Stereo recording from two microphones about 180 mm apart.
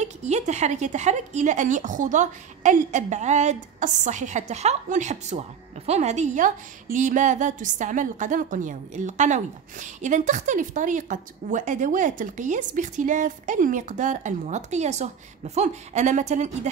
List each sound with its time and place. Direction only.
0.0 s a woman's voice: 40° right (ahead or behind)